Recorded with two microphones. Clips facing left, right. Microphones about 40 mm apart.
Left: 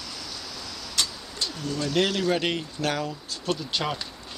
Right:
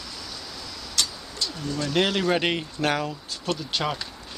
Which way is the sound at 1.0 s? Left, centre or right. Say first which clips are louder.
Right 1 dB; centre.